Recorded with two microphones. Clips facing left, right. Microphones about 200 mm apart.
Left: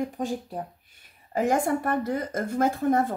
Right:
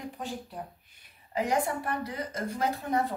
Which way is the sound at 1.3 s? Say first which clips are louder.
Left 5 dB; 50° left (ahead or behind).